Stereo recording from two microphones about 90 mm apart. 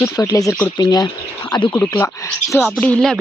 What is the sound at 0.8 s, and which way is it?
Speech, 45° left (ahead or behind).